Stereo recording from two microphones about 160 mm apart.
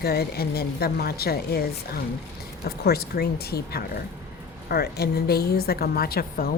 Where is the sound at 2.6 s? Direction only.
75° left (ahead or behind).